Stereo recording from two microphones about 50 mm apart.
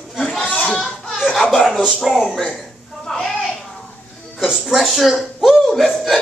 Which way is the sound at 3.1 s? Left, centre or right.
Centre.